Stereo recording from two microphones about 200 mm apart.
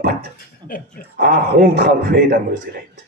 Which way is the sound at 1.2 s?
50° right (ahead or behind).